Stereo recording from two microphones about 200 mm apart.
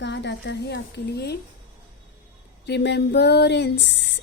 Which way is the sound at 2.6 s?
55° left (ahead or behind).